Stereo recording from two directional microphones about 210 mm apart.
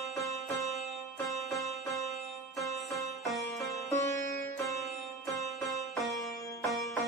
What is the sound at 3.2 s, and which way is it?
Music, centre (ahead or behind).